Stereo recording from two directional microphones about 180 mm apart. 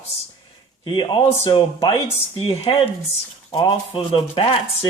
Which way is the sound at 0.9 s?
25° left (ahead or behind).